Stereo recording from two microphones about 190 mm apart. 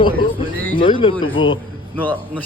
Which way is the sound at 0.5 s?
10° left (ahead or behind).